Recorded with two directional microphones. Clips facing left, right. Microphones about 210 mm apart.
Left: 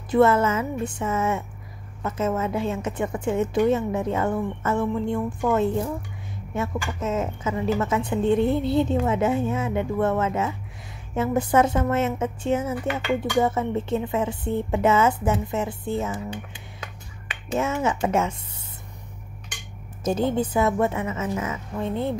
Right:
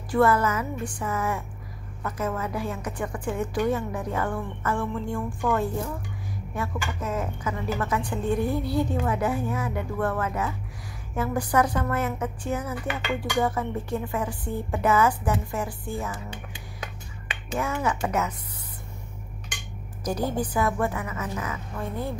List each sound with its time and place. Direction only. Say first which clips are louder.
0.1 s a woman's voice: left 3 dB; 25° left (ahead or behind)
17.6 s a woman's voice: left 3 dB; 25° left (ahead or behind)
20.0 s a woman's voice: left 4 dB; 25° left (ahead or behind)